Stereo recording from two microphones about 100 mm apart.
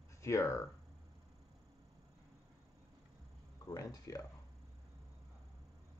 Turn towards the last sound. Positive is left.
turn(degrees=35)  # may be behind; listen again after turning